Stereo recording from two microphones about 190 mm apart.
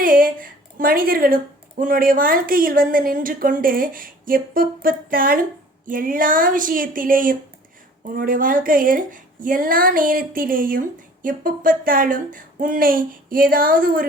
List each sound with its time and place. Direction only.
0.0 s speech: 45° right (ahead or behind)